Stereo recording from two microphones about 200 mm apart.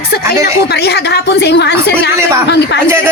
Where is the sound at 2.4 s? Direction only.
60° left (ahead or behind).